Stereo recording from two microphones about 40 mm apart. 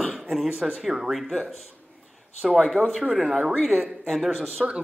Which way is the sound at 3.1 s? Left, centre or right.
Centre.